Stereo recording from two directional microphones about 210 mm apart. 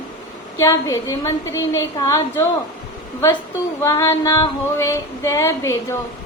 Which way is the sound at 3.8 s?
15° left (ahead or behind).